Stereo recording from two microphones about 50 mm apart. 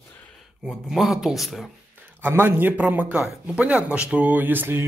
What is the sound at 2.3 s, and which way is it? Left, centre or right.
A man's voice, right.